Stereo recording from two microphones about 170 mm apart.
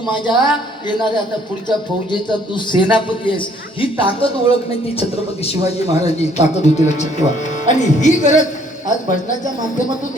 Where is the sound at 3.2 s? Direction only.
30° left (ahead or behind); by 8.4 s 45° left (ahead or behind).